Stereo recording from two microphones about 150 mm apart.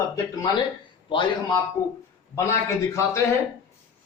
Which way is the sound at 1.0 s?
35° left (ahead or behind).